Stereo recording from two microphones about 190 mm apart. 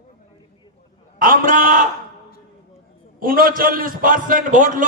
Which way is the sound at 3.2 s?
50° right (ahead or behind).